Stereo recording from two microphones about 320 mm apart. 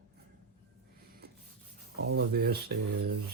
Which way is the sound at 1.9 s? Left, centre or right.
Right.